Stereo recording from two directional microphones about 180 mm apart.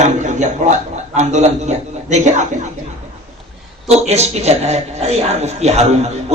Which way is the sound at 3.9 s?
35° right (ahead or behind).